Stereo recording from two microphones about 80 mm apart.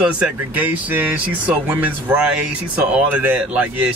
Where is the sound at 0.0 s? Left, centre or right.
Centre.